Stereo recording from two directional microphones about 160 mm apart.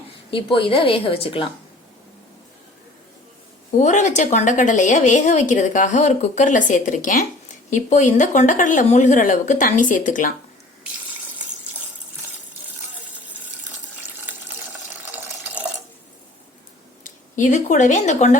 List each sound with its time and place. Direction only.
0.3 s a woman's voice: 35° left (ahead or behind)
3.8 s a woman's voice: 50° left (ahead or behind)
17.0 s speech: 50° left (ahead or behind)